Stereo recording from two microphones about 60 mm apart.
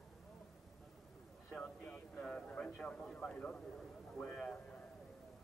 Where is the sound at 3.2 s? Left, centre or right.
Centre.